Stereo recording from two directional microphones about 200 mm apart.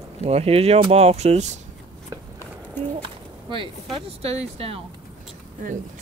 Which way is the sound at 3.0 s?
25° right (ahead or behind).